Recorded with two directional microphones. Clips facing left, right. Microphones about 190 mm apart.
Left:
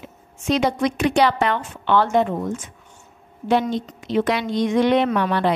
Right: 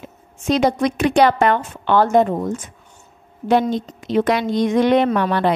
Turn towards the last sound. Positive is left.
turn(degrees=-45)  # may be behind; listen again after turning